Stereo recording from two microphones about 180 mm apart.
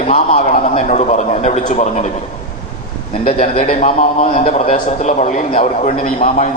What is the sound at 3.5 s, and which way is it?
A man's voice, 45° left (ahead or behind).